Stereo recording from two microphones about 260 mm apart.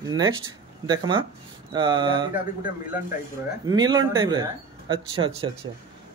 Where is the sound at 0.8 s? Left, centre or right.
Centre.